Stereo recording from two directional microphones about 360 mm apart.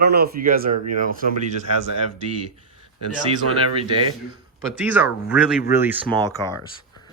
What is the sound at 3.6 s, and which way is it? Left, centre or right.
Speech, centre.